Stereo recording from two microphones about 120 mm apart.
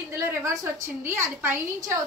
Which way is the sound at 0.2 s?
25° right (ahead or behind).